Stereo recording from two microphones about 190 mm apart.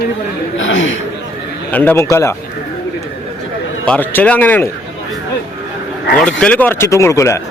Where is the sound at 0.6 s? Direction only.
85° left.